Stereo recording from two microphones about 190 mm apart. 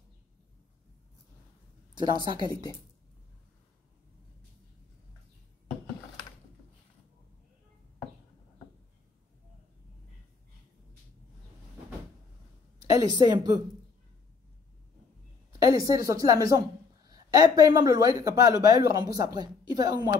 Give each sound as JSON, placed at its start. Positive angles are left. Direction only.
{"t": 2.0, "sound": "a woman's voice", "side_deg": -25}
{"t": 2.4, "sound": "a woman's voice", "side_deg": 20}
{"t": 12.9, "sound": "a woman's voice", "side_deg": -20}
{"t": 15.6, "sound": "a woman's voice", "side_deg": -20}